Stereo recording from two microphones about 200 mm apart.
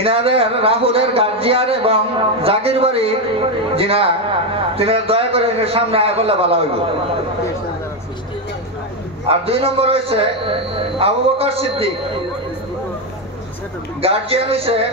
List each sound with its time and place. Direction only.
0.0 s a man's voice: 30° right (ahead or behind)
9.3 s a man's voice: 30° right (ahead or behind)
14.0 s a man's voice: 30° right (ahead or behind)